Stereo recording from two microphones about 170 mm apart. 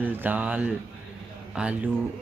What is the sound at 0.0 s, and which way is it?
A man's voice, 10° right (ahead or behind).